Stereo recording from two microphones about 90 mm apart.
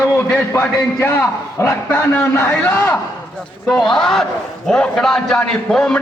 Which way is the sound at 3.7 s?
5° left (ahead or behind).